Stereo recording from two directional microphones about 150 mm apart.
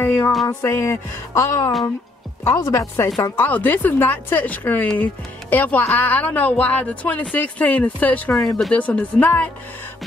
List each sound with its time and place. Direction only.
0.0 s music: 15° left (ahead or behind)
0.6 s speech: 15° left (ahead or behind)
8.3 s speech: 20° left (ahead or behind)
8.5 s speech: 5° left (ahead or behind)